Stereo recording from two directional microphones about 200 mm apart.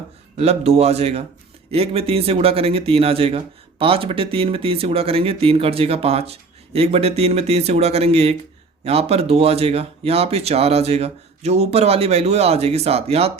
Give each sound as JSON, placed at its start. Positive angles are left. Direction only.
{"t": 0.3, "sound": "speech", "side_deg": -30}